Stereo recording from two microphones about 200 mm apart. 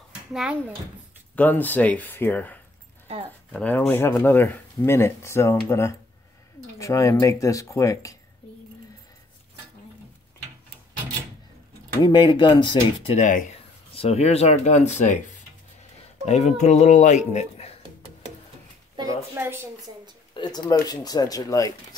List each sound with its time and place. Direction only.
0.3 s a child's voice: 5° right (ahead or behind)
1.3 s speech: 10° left (ahead or behind)
3.5 s speech: 5° left (ahead or behind)
12.0 s speech: 25° left (ahead or behind)
13.0 s a man's voice: 35° left (ahead or behind)
18.9 s a sound: 15° right (ahead or behind)
20.3 s speech: 20° left (ahead or behind)